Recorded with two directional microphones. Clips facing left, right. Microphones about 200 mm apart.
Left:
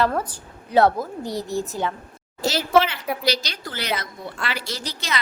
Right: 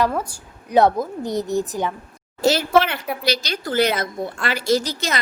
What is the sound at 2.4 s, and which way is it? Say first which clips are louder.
A woman's voice: right 2 dB; 55° right (ahead or behind).